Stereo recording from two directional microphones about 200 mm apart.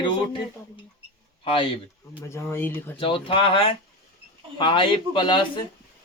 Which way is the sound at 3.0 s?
25° left (ahead or behind).